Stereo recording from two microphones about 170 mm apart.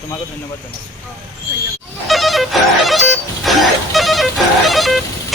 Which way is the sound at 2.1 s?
Centre (ahead or behind).